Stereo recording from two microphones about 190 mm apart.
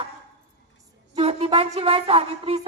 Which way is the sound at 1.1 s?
35° right (ahead or behind).